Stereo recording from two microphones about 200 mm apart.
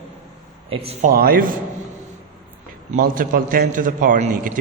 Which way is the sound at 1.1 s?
45° right (ahead or behind).